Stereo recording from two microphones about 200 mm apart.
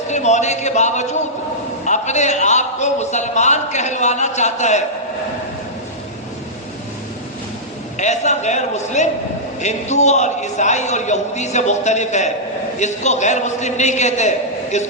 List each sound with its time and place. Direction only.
0.1 s a man's voice: 35° left (ahead or behind)
7.9 s a man's voice: 35° left (ahead or behind)